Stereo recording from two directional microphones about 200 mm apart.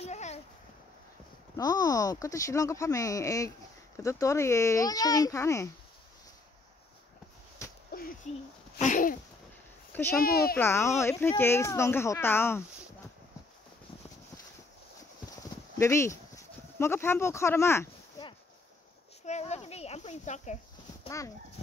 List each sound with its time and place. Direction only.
0.0 s a sound: 35° left (ahead or behind)
1.6 s speech: 20° left (ahead or behind)
7.9 s a sound: 50° left (ahead or behind)
10.1 s speech: 50° left (ahead or behind)
10.6 s speech: 15° left (ahead or behind)
15.8 s speech: 15° left (ahead or behind)
19.2 s a child's voice: 35° left (ahead or behind)